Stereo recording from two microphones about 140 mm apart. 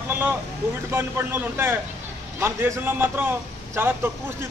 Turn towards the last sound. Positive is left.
turn(degrees=-15)  # may be behind; listen again after turning